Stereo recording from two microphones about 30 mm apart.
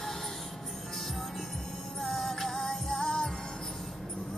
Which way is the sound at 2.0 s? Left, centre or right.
Centre.